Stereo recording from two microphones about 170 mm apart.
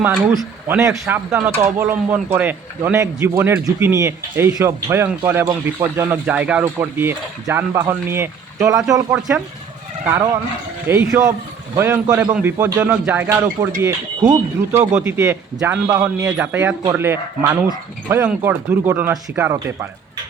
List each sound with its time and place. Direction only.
0.7 s speech: 15° right (ahead or behind)